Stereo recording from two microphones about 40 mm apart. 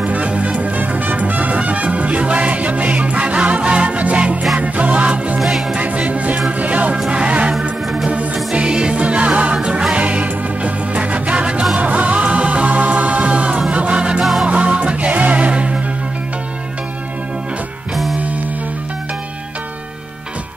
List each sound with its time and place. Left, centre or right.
0.0 s music: right
5.4 s music: centre
5.8 s music: right
8.5 s music: right